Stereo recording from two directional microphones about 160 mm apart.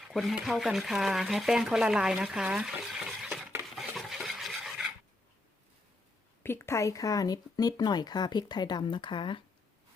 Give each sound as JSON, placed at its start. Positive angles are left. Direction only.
{"t": 0.1, "sound": "speech", "side_deg": 0}
{"t": 3.8, "sound": "stir", "side_deg": 0}
{"t": 6.4, "sound": "speech", "side_deg": 15}